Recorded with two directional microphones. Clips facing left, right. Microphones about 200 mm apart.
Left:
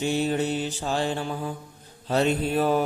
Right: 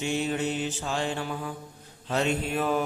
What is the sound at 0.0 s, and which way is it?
Mantra, 35° left (ahead or behind).